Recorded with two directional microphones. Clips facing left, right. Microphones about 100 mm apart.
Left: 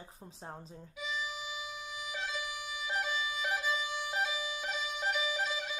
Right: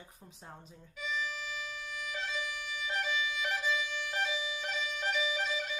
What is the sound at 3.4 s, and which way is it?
Violin, 10° left (ahead or behind).